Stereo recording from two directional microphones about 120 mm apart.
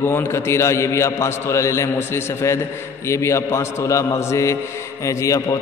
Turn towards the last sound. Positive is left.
turn(degrees=25)  # may be behind; listen again after turning